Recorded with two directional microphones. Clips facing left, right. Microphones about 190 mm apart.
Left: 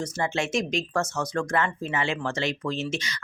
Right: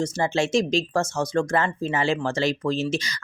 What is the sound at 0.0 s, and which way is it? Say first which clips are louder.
Speech: right 5 dB; 30° right (ahead or behind).